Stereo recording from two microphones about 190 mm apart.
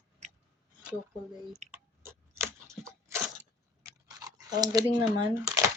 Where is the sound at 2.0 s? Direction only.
15° right (ahead or behind).